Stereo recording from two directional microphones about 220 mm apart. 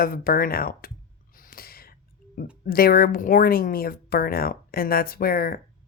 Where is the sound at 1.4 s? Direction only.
40° left (ahead or behind).